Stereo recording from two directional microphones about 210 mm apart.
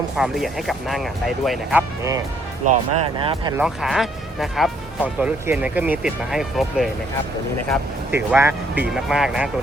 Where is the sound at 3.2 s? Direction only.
25° right (ahead or behind).